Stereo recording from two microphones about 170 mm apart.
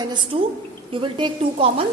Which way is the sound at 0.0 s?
25° right (ahead or behind).